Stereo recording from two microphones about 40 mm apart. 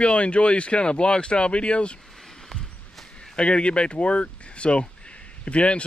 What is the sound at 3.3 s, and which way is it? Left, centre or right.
Speech, left.